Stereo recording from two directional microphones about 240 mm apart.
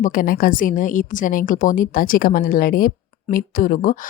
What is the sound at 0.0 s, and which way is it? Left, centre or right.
Speech, left.